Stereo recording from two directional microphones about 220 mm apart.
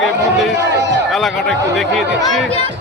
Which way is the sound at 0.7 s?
55° right (ahead or behind).